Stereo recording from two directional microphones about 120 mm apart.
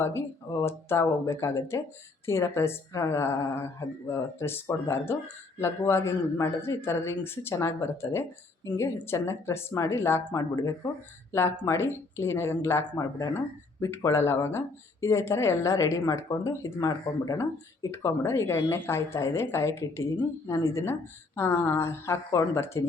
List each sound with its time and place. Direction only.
0.0 s speech: 20° left (ahead or behind)